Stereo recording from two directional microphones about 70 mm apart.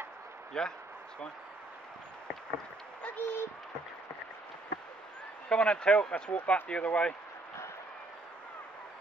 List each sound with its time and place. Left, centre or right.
0.5 s speech: centre
3.2 s a sound: left
5.5 s speech: centre